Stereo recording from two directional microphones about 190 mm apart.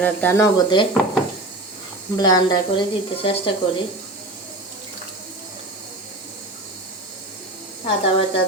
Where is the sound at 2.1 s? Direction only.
20° left (ahead or behind).